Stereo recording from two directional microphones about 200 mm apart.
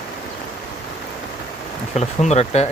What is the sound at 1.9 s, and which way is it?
Speech, 35° left (ahead or behind).